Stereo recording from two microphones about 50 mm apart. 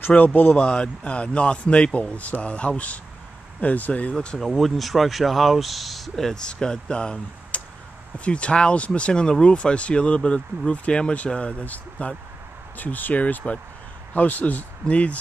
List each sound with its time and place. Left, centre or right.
0.2 s speech: left
0.6 s speech: centre
4.1 s speech: left
4.4 s speech: centre; by 15.1 s left